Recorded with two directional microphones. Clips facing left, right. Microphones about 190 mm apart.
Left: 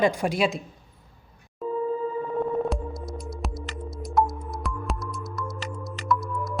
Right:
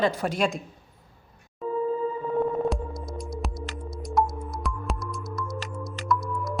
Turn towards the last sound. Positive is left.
turn(degrees=0)  # may be behind; listen again after turning